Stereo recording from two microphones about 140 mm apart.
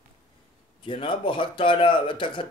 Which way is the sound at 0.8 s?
35° left (ahead or behind).